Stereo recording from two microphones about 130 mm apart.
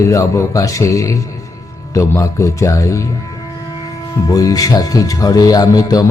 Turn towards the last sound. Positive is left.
turn(degrees=30)  # may be behind; listen again after turning